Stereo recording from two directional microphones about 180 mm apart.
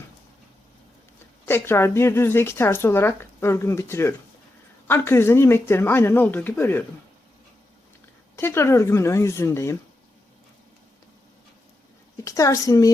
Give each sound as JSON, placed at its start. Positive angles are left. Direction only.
{"t": 1.5, "sound": "speech", "side_deg": 10}
{"t": 8.4, "sound": "speech", "side_deg": 15}
{"t": 12.2, "sound": "a woman's voice", "side_deg": 20}